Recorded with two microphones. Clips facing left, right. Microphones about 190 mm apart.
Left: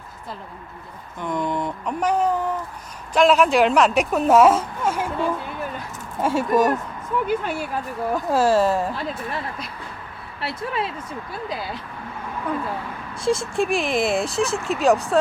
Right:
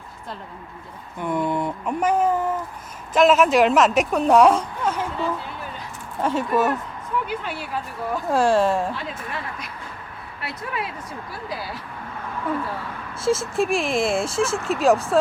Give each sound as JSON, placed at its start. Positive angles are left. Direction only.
{"t": 1.2, "sound": "speech", "side_deg": -5}
{"t": 7.3, "sound": "speech", "side_deg": 45}
{"t": 8.3, "sound": "speech", "side_deg": 0}
{"t": 9.0, "sound": "speech", "side_deg": 35}
{"t": 13.1, "sound": "speech", "side_deg": -5}